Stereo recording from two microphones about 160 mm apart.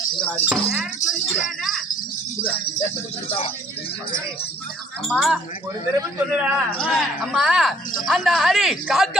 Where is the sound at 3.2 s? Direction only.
35° left (ahead or behind).